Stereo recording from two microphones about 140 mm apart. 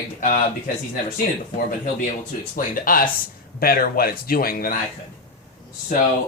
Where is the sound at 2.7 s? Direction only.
85° left.